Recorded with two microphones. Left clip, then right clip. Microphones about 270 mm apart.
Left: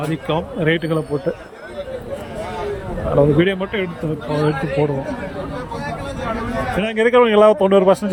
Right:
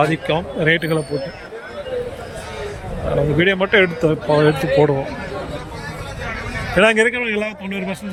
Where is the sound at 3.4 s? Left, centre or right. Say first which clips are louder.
Right 4 dB; centre.